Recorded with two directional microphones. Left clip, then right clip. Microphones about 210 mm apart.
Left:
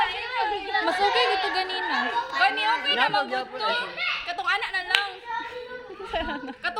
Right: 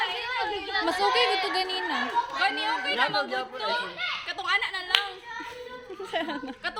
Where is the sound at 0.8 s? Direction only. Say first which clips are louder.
Left 1 dB; 10° right (ahead or behind).